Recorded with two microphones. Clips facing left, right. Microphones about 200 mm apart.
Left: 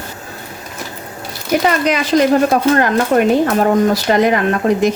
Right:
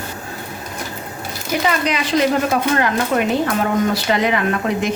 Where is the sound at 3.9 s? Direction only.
45° left (ahead or behind).